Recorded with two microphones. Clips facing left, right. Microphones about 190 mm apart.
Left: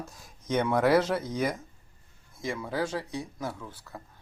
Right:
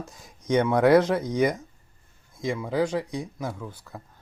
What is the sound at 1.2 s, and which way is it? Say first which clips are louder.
Speech: right 6 dB; 15° right (ahead or behind).